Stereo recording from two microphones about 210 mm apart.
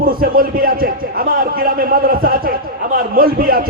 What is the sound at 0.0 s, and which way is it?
A man's voice, 45° right (ahead or behind).